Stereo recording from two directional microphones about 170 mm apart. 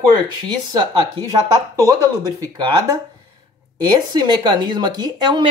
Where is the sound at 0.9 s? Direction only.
20° right (ahead or behind).